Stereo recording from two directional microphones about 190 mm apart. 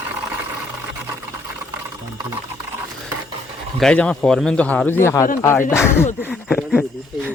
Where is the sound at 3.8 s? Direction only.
5° left (ahead or behind).